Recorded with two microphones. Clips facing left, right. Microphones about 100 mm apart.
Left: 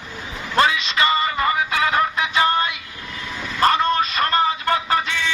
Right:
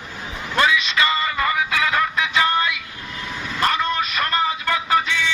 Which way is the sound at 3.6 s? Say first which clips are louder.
Left 4 dB; 35° left (ahead or behind).